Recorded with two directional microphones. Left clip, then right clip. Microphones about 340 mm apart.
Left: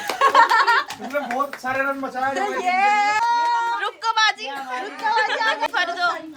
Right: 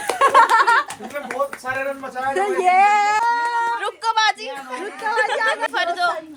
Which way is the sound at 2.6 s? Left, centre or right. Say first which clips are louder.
Right 4 dB; centre.